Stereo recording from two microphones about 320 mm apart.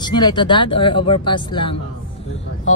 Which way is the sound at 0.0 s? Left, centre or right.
Centre.